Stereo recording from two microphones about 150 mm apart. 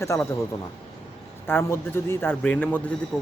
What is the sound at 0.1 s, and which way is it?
Speech, 20° left (ahead or behind).